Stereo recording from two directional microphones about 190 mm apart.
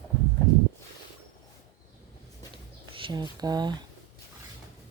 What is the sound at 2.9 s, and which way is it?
Speech, 25° right (ahead or behind).